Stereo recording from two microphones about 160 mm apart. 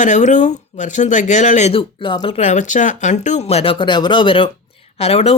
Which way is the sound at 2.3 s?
50° left (ahead or behind).